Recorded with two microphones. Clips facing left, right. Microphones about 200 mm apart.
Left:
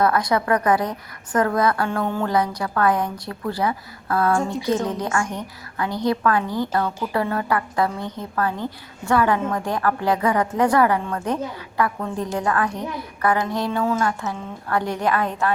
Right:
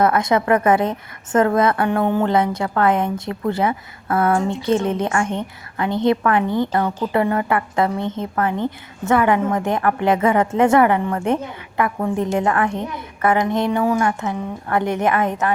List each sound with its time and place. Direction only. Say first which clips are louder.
0.0 s a woman's voice: right 3 dB; 25° right (ahead or behind)